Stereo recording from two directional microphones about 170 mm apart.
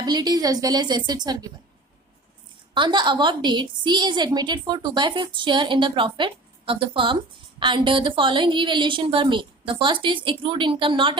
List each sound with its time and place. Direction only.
0.0 s a woman's voice: 25° right (ahead or behind)
2.7 s a woman's voice: 25° right (ahead or behind)